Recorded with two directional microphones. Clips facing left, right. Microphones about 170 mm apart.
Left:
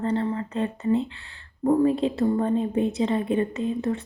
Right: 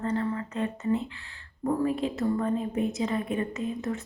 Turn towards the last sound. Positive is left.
turn(degrees=30)  # may be behind; listen again after turning